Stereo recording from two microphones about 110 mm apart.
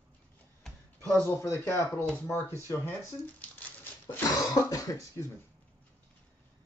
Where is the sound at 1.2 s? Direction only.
25° left (ahead or behind).